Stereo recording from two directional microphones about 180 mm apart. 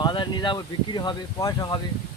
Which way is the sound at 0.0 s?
25° left (ahead or behind).